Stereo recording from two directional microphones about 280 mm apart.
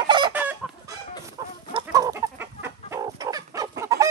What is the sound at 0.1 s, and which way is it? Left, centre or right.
Chicken, centre.